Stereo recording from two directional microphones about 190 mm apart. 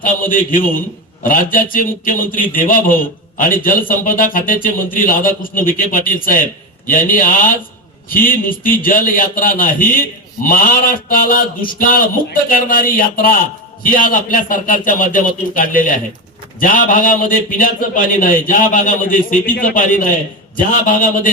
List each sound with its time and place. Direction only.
0.0 s a man's voice: 45° left (ahead or behind)